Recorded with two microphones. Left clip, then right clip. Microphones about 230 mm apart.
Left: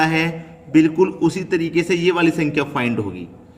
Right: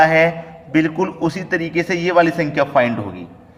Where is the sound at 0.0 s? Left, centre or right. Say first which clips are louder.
Right 6 dB; centre.